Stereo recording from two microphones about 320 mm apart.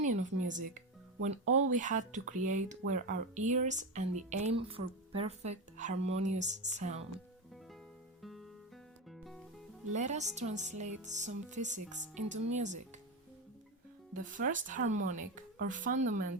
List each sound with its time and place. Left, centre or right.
0.0 s music: right
0.4 s speech: right
1.5 s speech: right
1.7 s speech: right
8.2 s guitar: centre
9.0 s music: centre
9.9 s speech: right
14.1 s speech: right